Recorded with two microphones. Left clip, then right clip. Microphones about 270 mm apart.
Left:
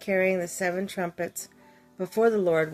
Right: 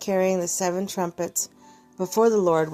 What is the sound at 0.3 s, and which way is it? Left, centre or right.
A woman's voice, centre.